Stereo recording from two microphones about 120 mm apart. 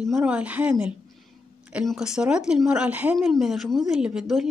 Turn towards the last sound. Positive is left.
turn(degrees=0)  # may be behind; listen again after turning